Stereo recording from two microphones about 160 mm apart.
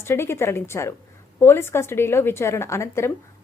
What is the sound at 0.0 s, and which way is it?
A woman's voice, 15° left (ahead or behind).